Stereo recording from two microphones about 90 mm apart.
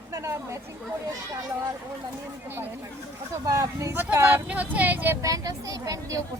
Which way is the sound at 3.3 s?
35° right (ahead or behind).